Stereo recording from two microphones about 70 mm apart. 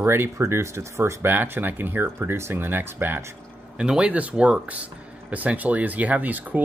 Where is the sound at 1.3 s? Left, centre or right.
Right.